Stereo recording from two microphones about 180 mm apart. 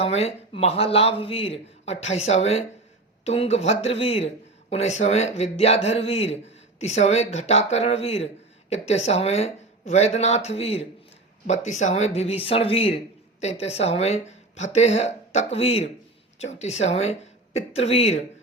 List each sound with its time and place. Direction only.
0.0 s speech: 35° left (ahead or behind)